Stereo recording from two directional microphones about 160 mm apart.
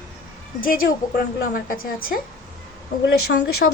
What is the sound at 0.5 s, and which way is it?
A woman's voice, 60° left (ahead or behind).